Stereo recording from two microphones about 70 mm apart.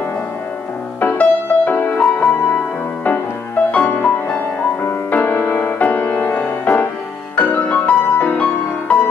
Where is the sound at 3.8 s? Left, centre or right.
Left.